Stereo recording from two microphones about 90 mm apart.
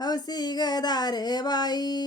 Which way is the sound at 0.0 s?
50° left (ahead or behind).